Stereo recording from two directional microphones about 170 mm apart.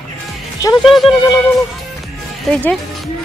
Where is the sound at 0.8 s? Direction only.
Centre (ahead or behind).